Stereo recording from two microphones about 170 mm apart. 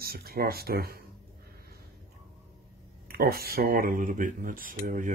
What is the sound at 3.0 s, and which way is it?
Speech, 60° right (ahead or behind).